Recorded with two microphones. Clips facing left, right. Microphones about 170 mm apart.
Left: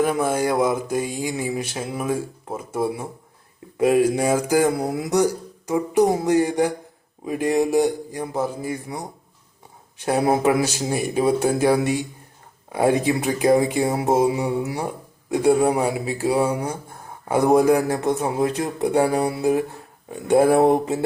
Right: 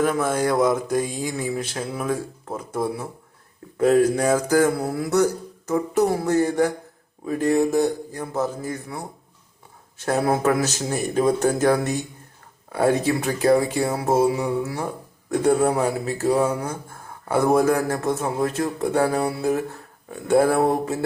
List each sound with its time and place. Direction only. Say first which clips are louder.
0.0 s speech: left 1 dB; 10° left (ahead or behind)
10.1 s speech: left 2 dB; 15° left (ahead or behind)